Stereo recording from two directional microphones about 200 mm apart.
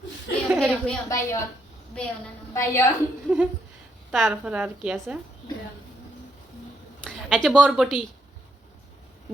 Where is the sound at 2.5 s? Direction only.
15° left (ahead or behind).